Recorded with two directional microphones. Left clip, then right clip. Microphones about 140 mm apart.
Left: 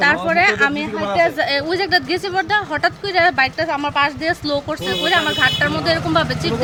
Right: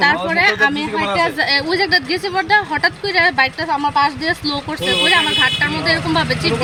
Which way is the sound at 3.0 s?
45° left (ahead or behind).